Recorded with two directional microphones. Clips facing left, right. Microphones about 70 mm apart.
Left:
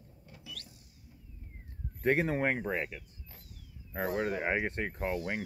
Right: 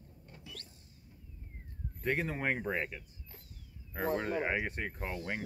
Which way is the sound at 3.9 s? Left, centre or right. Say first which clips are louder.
Left 1 dB; centre.